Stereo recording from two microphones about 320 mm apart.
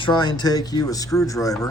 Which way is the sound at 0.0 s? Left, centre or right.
Centre.